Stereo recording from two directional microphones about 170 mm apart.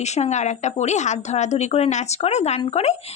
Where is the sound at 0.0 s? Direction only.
40° left (ahead or behind).